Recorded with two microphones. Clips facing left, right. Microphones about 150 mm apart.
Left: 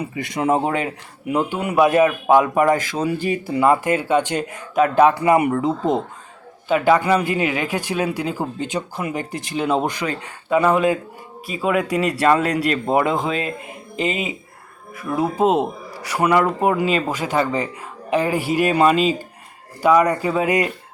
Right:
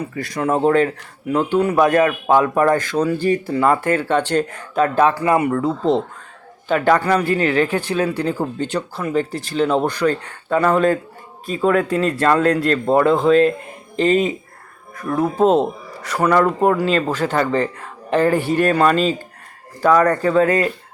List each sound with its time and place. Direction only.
0.2 s a man's voice: 20° left (ahead or behind)